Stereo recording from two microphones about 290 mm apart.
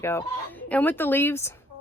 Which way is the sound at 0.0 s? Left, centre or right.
Centre.